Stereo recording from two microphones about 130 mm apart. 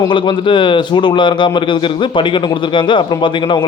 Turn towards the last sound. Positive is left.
turn(degrees=35)  # may be behind; listen again after turning